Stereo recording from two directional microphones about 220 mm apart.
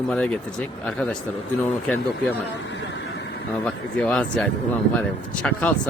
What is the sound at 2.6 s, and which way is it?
Vehicle, 55° left (ahead or behind).